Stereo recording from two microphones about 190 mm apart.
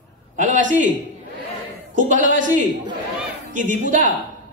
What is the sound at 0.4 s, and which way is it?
Speech, 40° right (ahead or behind).